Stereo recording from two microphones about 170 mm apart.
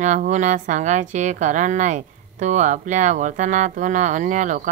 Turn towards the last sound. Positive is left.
turn(degrees=-50)  # may be behind; listen again after turning